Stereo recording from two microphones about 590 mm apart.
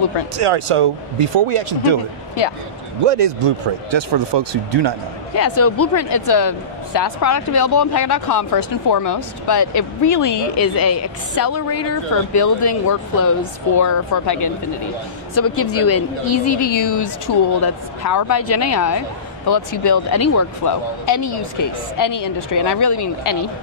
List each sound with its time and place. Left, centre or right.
0.4 s speech: right
3.9 s speech: right
5.3 s speech: left
6.2 s speech: left
16.3 s speech: left